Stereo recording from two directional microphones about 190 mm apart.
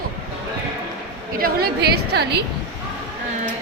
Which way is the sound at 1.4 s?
55° right (ahead or behind).